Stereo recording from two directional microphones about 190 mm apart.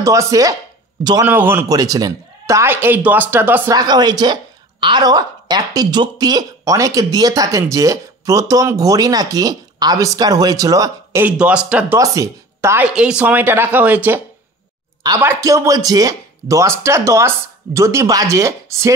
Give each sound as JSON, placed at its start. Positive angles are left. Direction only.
{"t": 0.0, "sound": "a man's voice", "side_deg": -15}
{"t": 12.0, "sound": "speech", "side_deg": -15}